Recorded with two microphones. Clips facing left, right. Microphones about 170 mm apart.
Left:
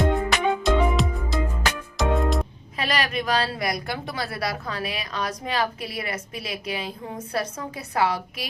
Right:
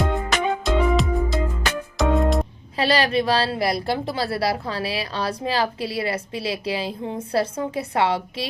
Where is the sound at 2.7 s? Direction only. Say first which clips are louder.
Right 6 dB; 30° right (ahead or behind).